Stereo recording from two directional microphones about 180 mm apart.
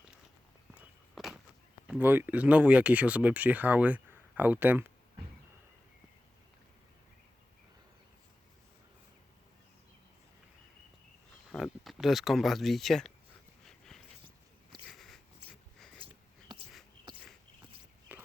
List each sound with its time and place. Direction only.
0.7 s walk: centre (ahead or behind)
1.9 s speech: 10° right (ahead or behind)
11.5 s speech: centre (ahead or behind)
13.7 s a sound: centre (ahead or behind)
14.8 s biting: centre (ahead or behind)
18.1 s biting: 10° right (ahead or behind)